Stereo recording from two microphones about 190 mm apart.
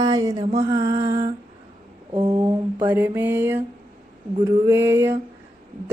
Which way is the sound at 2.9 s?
10° right (ahead or behind).